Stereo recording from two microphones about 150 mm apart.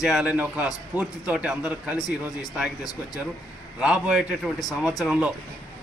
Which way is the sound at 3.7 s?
5° right (ahead or behind).